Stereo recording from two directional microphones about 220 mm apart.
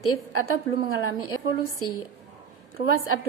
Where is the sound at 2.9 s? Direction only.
75° left (ahead or behind).